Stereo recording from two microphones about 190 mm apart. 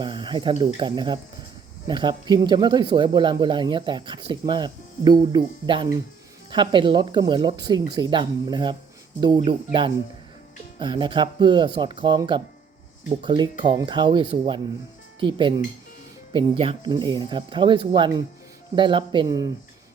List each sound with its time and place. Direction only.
0.0 s speech: 25° right (ahead or behind)
10.8 s speech: 25° right (ahead or behind)